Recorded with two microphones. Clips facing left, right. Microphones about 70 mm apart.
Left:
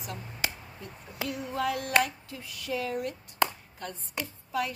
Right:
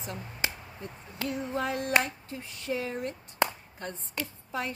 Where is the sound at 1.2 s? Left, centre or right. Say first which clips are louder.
Even; right.